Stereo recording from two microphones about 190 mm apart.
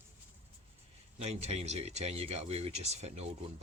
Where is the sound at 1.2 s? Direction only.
35° right (ahead or behind).